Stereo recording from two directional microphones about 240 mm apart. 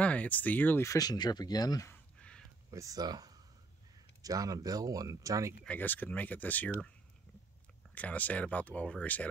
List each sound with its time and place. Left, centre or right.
0.0 s speech: centre
2.7 s speech: centre
5.6 s speech: centre
7.9 s speech: centre